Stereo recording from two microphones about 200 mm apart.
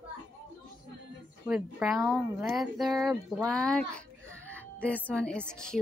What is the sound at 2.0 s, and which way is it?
Speech, 15° right (ahead or behind).